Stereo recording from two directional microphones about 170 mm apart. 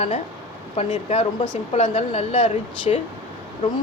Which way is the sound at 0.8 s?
35° left (ahead or behind).